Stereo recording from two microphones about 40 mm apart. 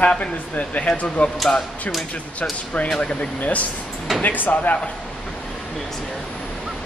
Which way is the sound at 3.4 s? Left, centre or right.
Left.